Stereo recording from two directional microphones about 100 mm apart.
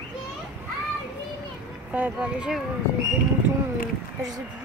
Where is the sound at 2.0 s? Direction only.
15° right (ahead or behind).